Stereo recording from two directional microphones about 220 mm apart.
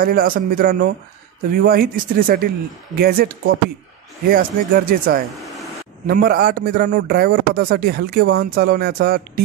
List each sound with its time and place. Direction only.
0.0 s a man's voice: 40° right (ahead or behind)